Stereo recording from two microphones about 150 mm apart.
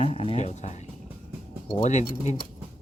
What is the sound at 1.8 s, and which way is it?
Speech, 50° left (ahead or behind).